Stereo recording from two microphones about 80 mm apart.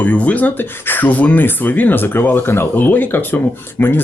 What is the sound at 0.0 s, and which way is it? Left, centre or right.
Speech, centre.